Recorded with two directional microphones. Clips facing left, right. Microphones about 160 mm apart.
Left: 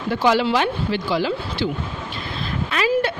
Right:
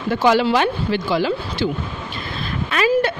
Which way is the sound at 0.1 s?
50° right (ahead or behind).